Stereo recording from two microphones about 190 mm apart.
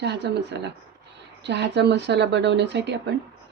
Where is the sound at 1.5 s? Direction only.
65° right (ahead or behind).